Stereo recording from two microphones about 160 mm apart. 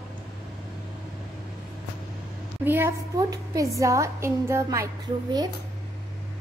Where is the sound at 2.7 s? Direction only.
15° right (ahead or behind).